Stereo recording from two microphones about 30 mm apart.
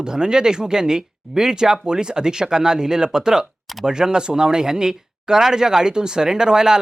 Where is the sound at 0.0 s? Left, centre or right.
Right.